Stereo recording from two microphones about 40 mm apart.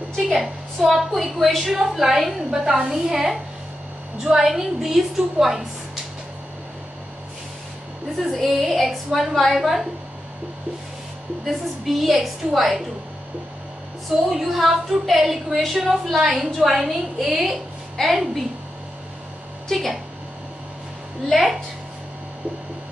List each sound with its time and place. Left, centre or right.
0.4 s a woman's voice: centre
8.3 s a woman's voice: centre
11.4 s a woman's voice: centre
14.3 s a woman's voice: centre
19.7 s a woman's voice: centre
21.3 s a woman's voice: centre